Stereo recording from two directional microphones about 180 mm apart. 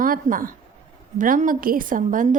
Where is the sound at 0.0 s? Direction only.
50° right (ahead or behind).